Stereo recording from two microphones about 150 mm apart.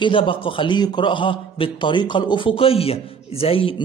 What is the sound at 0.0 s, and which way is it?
A man's voice, 35° left (ahead or behind).